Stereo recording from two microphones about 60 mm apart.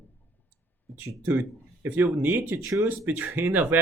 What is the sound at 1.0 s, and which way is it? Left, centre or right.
Speech, right.